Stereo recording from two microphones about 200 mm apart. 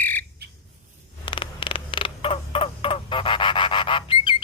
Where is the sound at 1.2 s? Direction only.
25° left (ahead or behind).